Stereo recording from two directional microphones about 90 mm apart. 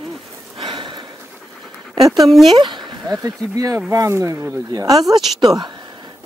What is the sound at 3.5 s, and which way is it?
Speech, 40° right (ahead or behind).